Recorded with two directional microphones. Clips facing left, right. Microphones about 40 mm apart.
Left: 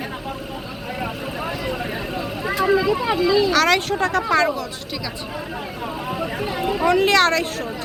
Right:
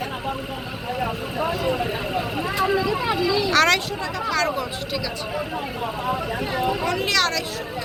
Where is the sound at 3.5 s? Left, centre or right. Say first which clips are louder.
Left 1 dB; centre.